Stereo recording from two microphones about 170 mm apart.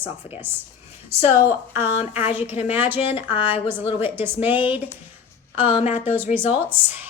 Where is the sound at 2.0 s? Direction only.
35° left (ahead or behind).